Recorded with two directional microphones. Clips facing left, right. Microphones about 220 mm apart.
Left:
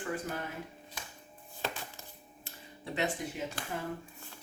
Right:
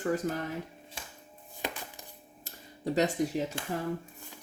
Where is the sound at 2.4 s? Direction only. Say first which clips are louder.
Right 11 dB; 40° right (ahead or behind).